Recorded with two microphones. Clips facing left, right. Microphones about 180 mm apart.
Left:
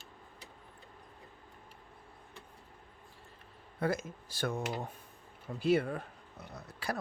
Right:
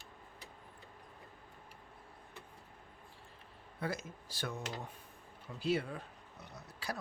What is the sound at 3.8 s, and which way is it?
Speech, 50° left (ahead or behind).